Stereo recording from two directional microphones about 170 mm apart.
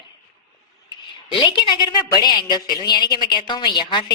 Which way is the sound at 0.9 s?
30° left (ahead or behind).